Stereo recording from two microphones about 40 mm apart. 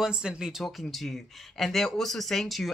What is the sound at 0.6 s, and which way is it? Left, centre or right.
Speech, centre.